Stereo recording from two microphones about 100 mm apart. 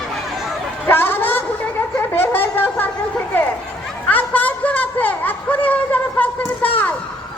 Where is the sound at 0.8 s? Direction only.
20° left (ahead or behind).